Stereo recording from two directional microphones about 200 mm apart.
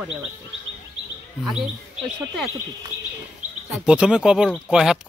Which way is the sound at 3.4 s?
5° right (ahead or behind).